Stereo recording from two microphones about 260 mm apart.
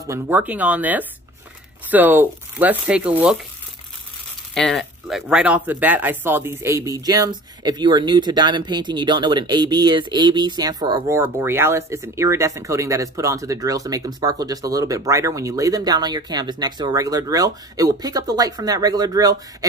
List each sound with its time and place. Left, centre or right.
0.0 s speech: centre
4.6 s speech: centre